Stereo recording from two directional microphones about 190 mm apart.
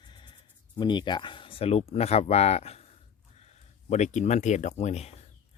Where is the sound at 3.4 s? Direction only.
35° left (ahead or behind).